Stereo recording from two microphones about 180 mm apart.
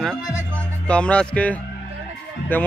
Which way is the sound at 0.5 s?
5° left (ahead or behind).